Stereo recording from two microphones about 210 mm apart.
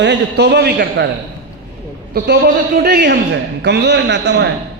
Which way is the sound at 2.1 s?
55° right (ahead or behind).